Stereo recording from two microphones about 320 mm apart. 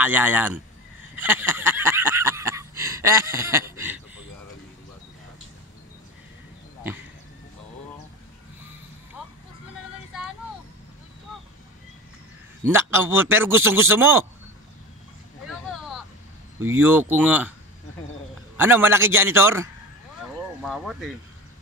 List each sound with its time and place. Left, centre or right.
0.0 s speech: centre
12.6 s a man's voice: centre
16.5 s a man's voice: centre
18.6 s a man's voice: centre